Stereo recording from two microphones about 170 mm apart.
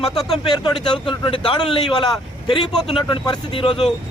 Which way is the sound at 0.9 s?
30° left (ahead or behind).